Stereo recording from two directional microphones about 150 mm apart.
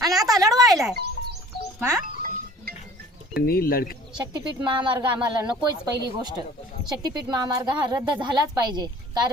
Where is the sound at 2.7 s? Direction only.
90° right.